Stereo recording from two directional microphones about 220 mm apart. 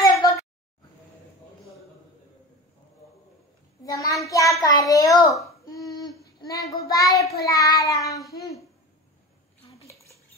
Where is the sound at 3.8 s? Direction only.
15° left (ahead or behind).